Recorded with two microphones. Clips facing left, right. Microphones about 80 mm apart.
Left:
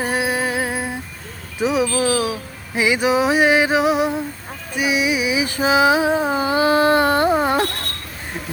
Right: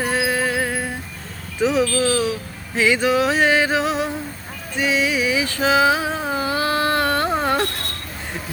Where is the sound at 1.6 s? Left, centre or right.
Centre.